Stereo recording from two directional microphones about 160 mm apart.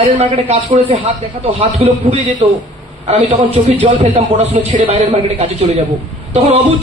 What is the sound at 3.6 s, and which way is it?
A man's voice, 40° right (ahead or behind).